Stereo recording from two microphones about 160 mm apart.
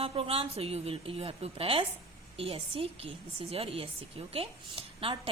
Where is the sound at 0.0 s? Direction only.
40° right (ahead or behind).